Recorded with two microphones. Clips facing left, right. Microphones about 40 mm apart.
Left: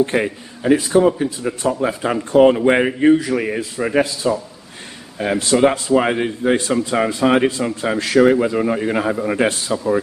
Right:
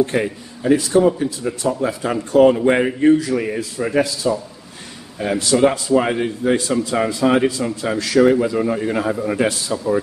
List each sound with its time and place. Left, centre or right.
0.0 s a man's voice: left